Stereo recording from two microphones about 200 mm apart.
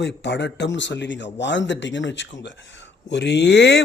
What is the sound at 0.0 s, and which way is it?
Speech, 60° left (ahead or behind).